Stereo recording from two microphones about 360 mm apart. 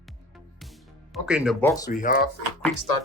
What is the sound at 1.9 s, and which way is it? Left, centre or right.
Speech, left.